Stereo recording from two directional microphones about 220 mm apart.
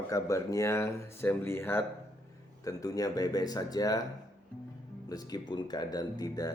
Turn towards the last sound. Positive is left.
turn(degrees=15)  # may be behind; listen again after turning